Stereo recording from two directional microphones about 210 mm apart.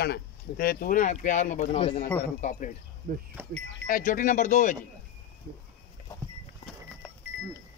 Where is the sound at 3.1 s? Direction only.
45° right (ahead or behind).